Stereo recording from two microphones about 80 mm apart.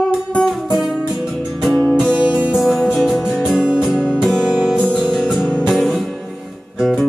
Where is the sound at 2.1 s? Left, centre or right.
Centre.